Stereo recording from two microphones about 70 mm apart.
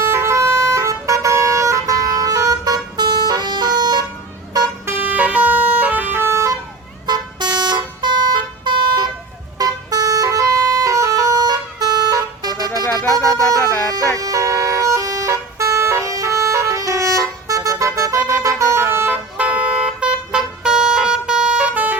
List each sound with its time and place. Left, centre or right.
0.0 s emergency vehicle: right
4.9 s vehicle: right
7.1 s vehicle: right
9.6 s vehicle: right
12.8 s music: left
13.1 s music: right
14.2 s vehicle: right
19.4 s vehicle: right